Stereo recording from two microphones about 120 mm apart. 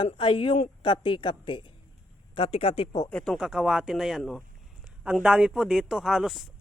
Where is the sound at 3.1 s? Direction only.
5° left (ahead or behind).